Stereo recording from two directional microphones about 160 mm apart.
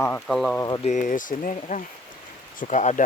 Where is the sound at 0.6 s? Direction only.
25° left (ahead or behind).